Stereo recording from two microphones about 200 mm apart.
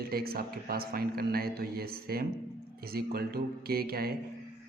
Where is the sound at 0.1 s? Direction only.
50° right (ahead or behind).